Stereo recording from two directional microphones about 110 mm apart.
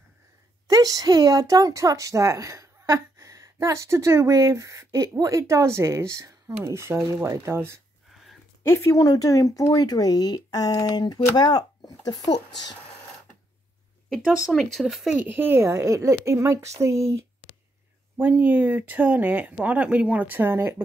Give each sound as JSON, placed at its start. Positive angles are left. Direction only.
{"t": 0.7, "sound": "a woman's voice", "side_deg": -35}
{"t": 8.6, "sound": "speech", "side_deg": 25}
{"t": 14.2, "sound": "speech", "side_deg": -5}
{"t": 15.1, "sound": "a woman's voice", "side_deg": -15}
{"t": 18.2, "sound": "speech", "side_deg": -15}